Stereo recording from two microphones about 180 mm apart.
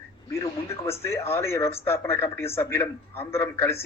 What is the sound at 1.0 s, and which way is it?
Speech, 15° left (ahead or behind).